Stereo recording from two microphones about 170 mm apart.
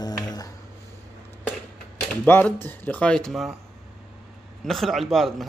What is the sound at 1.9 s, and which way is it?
Speech, 10° left (ahead or behind).